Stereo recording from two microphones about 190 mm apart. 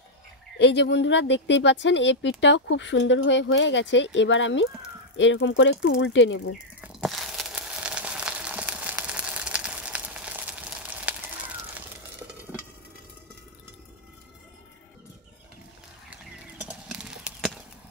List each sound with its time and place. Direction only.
0.6 s speech: 65° left (ahead or behind)
7.0 s a sound: centre (ahead or behind)
16.6 s clip-clop: 5° right (ahead or behind)